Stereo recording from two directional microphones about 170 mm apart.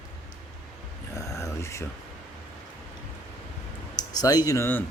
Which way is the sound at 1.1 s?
15° left (ahead or behind).